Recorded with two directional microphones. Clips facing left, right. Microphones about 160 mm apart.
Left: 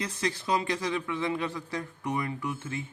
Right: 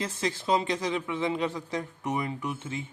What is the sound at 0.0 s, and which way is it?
Speech, 25° right (ahead or behind).